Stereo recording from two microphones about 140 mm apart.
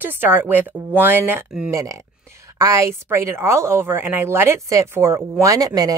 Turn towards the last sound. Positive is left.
turn(degrees=-25)  # may be behind; listen again after turning